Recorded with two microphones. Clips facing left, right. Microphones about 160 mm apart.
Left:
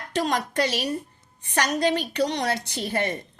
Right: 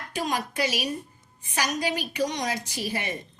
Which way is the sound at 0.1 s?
70° left (ahead or behind).